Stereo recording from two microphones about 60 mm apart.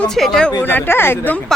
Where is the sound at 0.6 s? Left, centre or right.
Left.